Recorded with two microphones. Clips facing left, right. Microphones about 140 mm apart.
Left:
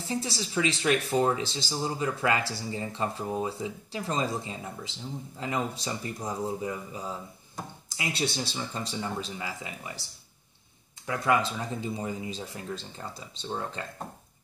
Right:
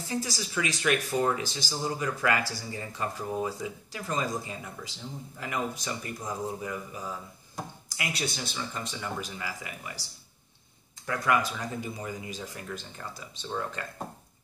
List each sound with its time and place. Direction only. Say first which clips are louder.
0.1 s speech: left 1 dB; 25° left (ahead or behind)
11.1 s speech: left 1 dB; 25° left (ahead or behind)